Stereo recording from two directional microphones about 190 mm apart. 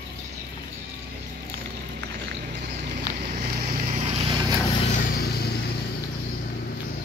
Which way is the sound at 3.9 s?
30° right (ahead or behind).